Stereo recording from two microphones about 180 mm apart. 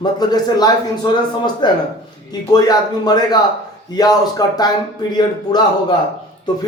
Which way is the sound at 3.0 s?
20° left (ahead or behind).